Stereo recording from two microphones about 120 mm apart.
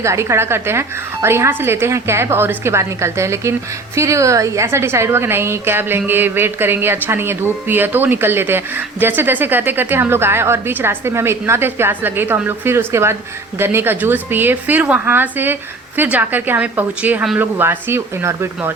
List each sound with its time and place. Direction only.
0.0 s a woman's voice: 25° right (ahead or behind)